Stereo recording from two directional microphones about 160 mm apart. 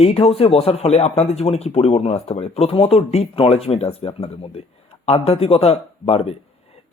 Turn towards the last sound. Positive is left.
turn(degrees=40)  # may be behind; listen again after turning